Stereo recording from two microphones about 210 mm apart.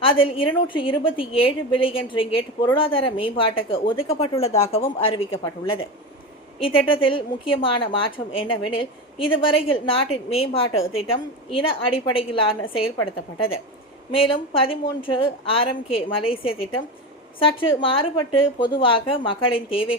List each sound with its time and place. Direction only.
0.0 s a woman's voice: 25° left (ahead or behind)
14.1 s a woman's voice: 25° left (ahead or behind)